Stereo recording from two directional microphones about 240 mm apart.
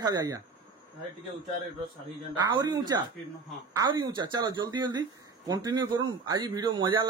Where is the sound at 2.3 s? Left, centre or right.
Centre.